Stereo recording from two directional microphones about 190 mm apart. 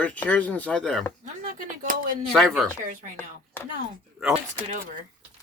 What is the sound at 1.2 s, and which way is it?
Speech, 45° right (ahead or behind).